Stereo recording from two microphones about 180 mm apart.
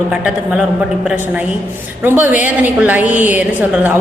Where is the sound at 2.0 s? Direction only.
10° right (ahead or behind).